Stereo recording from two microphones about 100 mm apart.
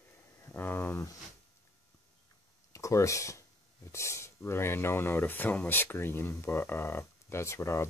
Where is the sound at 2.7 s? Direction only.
30° left (ahead or behind).